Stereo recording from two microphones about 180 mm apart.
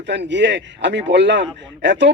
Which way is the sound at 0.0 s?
75° right (ahead or behind).